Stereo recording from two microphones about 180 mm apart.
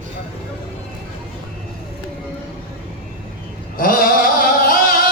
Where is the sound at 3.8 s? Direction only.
50° left (ahead or behind).